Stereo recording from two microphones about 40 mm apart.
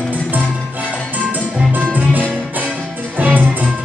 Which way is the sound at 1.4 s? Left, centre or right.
Right.